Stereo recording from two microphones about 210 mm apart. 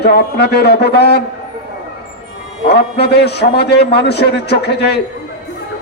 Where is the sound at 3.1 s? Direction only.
50° left (ahead or behind).